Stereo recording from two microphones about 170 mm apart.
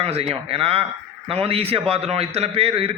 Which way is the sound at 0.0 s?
35° right (ahead or behind).